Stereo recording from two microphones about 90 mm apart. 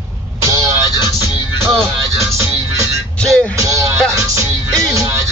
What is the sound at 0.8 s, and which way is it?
Music, 50° left (ahead or behind).